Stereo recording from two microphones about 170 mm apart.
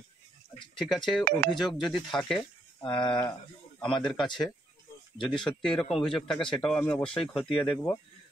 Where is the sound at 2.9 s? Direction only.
30° left (ahead or behind).